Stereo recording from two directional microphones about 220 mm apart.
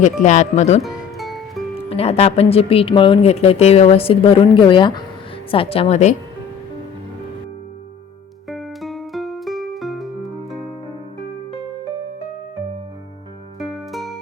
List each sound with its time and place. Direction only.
0.0 s speech: 35° left (ahead or behind)
1.2 s music: centre (ahead or behind)
1.9 s speech: 25° left (ahead or behind)
8.4 s music: centre (ahead or behind)
13.6 s music: centre (ahead or behind)